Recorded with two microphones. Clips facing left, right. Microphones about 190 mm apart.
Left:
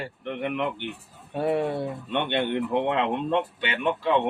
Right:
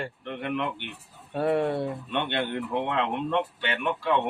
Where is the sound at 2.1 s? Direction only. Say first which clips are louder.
Left 4 dB; 20° left (ahead or behind).